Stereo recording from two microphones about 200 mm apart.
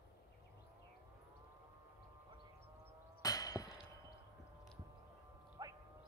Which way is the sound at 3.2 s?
20° left (ahead or behind).